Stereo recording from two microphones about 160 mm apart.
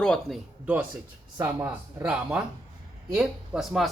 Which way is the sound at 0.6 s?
10° right (ahead or behind).